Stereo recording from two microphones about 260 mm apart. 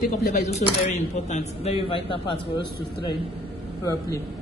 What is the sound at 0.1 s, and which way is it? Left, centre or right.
Speech, left.